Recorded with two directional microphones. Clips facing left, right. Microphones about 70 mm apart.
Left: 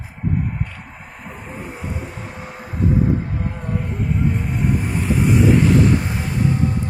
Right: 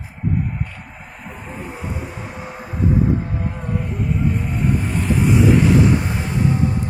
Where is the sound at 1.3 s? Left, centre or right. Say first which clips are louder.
Right 1 dB; centre.